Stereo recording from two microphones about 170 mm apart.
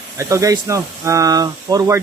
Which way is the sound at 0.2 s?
20° right (ahead or behind).